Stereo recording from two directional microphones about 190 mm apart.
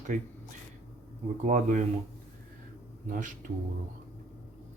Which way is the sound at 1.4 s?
40° right (ahead or behind).